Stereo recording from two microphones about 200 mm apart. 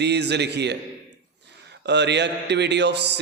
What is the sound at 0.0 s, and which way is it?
Speech, 55° right (ahead or behind).